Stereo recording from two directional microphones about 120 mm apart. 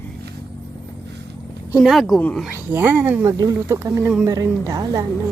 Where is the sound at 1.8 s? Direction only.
Centre (ahead or behind).